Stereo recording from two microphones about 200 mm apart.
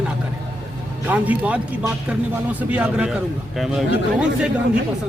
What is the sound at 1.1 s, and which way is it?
A man's voice, 5° right (ahead or behind).